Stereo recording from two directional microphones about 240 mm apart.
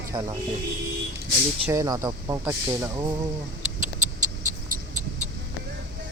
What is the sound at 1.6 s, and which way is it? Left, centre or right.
Speech, centre.